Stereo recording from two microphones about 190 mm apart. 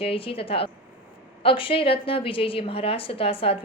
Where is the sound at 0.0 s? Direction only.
30° left (ahead or behind).